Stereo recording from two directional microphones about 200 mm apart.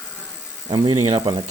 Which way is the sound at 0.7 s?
20° right (ahead or behind).